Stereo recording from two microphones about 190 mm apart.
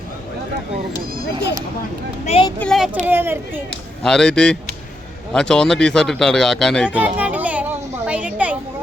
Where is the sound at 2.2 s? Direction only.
30° left (ahead or behind).